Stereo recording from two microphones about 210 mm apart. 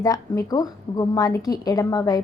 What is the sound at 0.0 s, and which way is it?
A woman's voice, 15° left (ahead or behind).